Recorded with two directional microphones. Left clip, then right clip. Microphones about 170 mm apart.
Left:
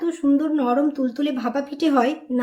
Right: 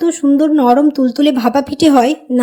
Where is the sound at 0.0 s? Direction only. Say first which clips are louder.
Right 9 dB; 45° right (ahead or behind).